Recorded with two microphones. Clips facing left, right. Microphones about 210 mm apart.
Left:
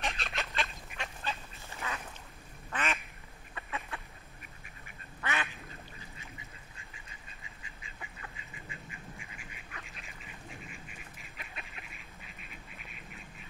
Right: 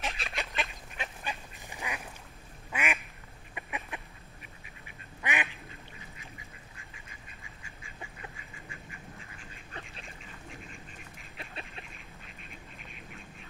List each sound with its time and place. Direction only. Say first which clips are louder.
0.0 s goose: even; centre (ahead or behind)
0.3 s goose: right 1 dB; 15° right (ahead or behind)
2.7 s quack: right 1 dB; 10° right (ahead or behind)
3.5 s duck: right 1 dB; 15° right (ahead or behind)
5.2 s quack: right 2 dB; 15° right (ahead or behind)
9.2 s duck: right 1 dB; 15° left (ahead or behind)
10.0 s duck: right 2 dB; 5° left (ahead or behind)
11.3 s duck: right 5 dB; 30° right (ahead or behind)
12.4 s duck: right 2 dB; 5° left (ahead or behind)